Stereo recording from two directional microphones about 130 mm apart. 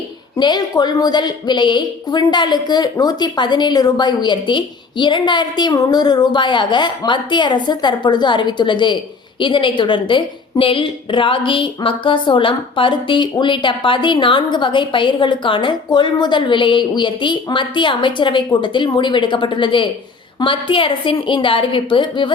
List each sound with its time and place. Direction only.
0.3 s a woman's voice: 35° left (ahead or behind)